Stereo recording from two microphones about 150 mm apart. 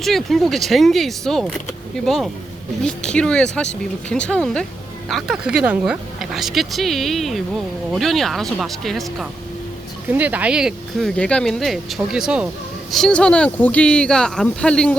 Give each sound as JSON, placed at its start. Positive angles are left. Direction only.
{"t": 0.0, "sound": "speech", "side_deg": 0}
{"t": 10.1, "sound": "speech", "side_deg": -10}